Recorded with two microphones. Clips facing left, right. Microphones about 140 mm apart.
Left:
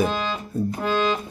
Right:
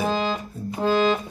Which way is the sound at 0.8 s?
35° right (ahead or behind).